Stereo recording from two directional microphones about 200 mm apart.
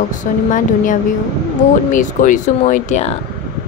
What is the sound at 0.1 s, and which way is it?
Speech, 40° left (ahead or behind).